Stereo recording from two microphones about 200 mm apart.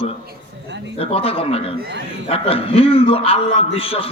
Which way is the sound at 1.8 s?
55° right (ahead or behind).